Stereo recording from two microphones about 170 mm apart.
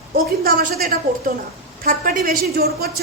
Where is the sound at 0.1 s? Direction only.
60° right (ahead or behind).